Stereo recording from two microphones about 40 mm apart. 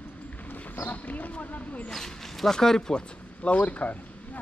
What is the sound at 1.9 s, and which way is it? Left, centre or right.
A man's voice, centre.